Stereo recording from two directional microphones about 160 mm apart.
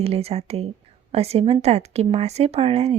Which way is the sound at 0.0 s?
40° right (ahead or behind).